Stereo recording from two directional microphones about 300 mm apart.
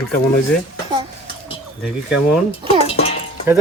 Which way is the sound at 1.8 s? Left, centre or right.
Centre.